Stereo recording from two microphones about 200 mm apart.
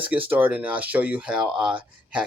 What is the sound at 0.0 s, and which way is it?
Speech, 10° right (ahead or behind).